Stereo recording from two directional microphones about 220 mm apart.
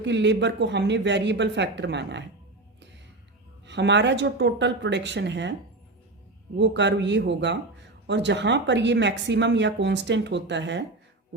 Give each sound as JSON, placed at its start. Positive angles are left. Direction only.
{"t": 0.0, "sound": "speech", "side_deg": -55}
{"t": 3.7, "sound": "speech", "side_deg": -50}
{"t": 6.6, "sound": "speech", "side_deg": -50}